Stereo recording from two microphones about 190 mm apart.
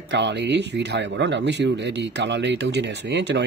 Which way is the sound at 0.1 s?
65° right (ahead or behind).